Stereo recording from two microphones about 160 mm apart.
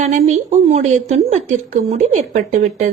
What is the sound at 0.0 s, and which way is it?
A woman's voice, 45° right (ahead or behind).